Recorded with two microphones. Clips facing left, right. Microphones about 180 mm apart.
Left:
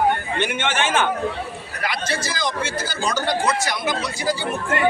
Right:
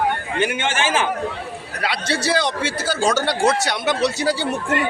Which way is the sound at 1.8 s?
70° right (ahead or behind).